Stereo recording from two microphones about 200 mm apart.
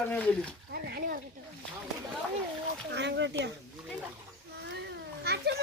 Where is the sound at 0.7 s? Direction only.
50° right (ahead or behind).